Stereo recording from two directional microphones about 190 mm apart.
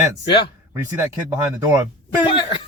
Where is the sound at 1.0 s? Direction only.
10° right (ahead or behind).